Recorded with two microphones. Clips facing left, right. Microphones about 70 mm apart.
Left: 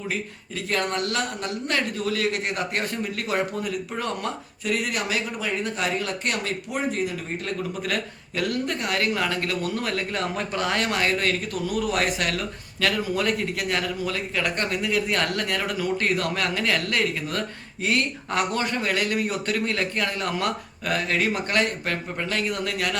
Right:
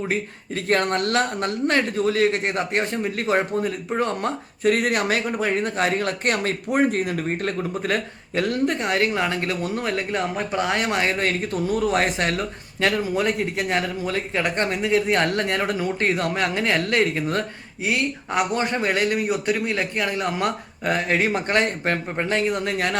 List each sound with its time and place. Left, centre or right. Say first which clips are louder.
0.1 s speech: right 5 dB; right
17.8 s speech: right 1 dB; centre; by 23.0 s right